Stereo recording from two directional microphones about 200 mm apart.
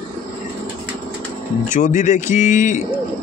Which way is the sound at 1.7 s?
40° left (ahead or behind).